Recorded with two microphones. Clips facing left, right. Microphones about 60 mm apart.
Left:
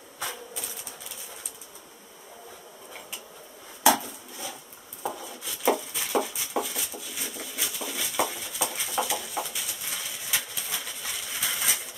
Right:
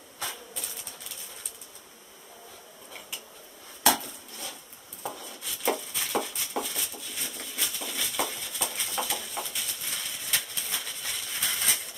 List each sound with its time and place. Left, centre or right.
0.2 s printer: centre
3.8 s dishes: centre
5.0 s a sound: centre